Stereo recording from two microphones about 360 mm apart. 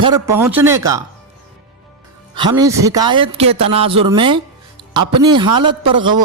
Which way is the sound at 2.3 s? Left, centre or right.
Centre.